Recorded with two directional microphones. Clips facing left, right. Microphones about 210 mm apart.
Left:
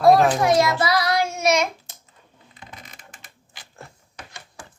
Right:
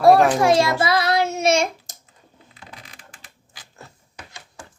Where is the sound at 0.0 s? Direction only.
30° right (ahead or behind).